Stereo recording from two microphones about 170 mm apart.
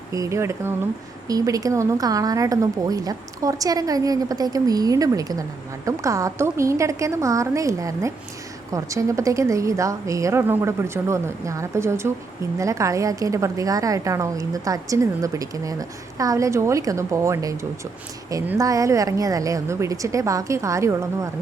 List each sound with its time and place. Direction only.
0.1 s a woman's voice: 20° right (ahead or behind)